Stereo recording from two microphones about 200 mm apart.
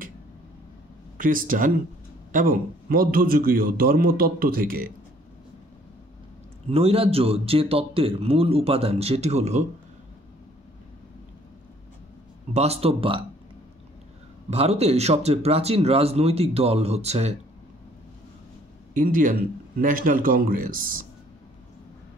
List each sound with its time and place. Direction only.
1.1 s a man's voice: 45° right (ahead or behind)
6.7 s a man's voice: 30° right (ahead or behind)
12.5 s a man's voice: 30° right (ahead or behind)
14.5 s speech: 30° right (ahead or behind)
18.9 s a man's voice: 40° right (ahead or behind)